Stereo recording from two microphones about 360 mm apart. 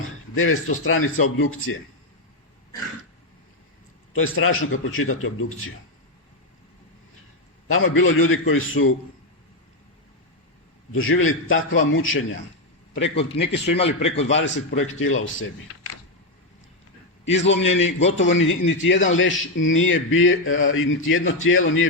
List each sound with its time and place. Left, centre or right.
0.3 s a man's voice: left
4.1 s a man's voice: left
7.7 s a man's voice: left
10.9 s a man's voice: left
12.9 s a man's voice: centre
14.3 s a man's voice: left
17.2 s a man's voice: left